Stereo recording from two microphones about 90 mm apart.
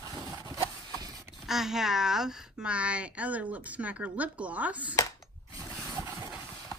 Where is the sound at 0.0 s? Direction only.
45° right (ahead or behind).